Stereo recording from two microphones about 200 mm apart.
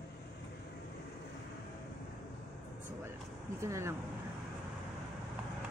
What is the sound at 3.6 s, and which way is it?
Speech, 15° right (ahead or behind).